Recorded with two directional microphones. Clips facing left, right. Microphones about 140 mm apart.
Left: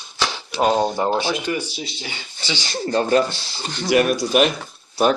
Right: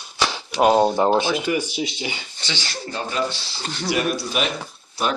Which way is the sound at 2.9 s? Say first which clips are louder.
Left 8 dB; 45° left (ahead or behind).